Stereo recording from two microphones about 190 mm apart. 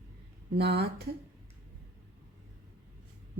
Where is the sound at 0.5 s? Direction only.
60° right (ahead or behind).